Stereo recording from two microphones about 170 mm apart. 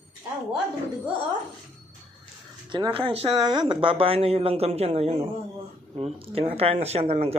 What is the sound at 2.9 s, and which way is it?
Speech, 35° right (ahead or behind).